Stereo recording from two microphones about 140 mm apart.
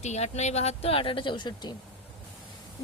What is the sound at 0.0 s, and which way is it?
Speech, 55° left (ahead or behind).